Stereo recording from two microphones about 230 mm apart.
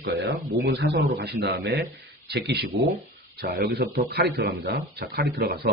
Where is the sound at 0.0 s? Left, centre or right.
Right.